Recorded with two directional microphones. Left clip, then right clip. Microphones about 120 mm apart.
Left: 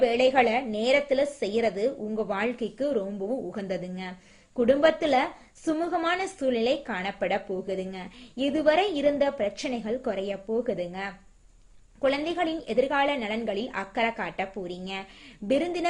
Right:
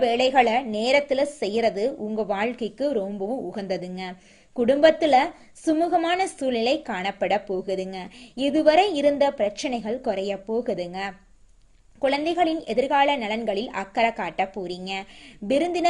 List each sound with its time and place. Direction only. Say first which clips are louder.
0.0 s a woman's voice: right 2 dB; 35° right (ahead or behind)